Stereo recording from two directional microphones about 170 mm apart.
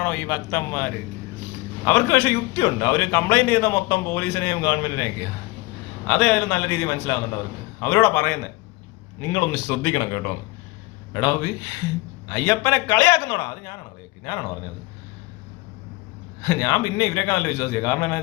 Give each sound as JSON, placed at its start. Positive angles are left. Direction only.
{"t": 0.0, "sound": "a man's voice", "side_deg": 15}
{"t": 6.1, "sound": "a man's voice", "side_deg": 5}
{"t": 16.5, "sound": "a man's voice", "side_deg": 15}